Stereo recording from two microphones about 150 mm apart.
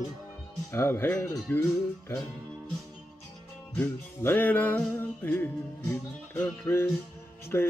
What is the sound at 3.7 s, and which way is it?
Music, 10° left (ahead or behind).